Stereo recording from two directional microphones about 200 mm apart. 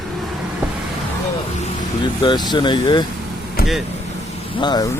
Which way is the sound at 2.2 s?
25° left (ahead or behind).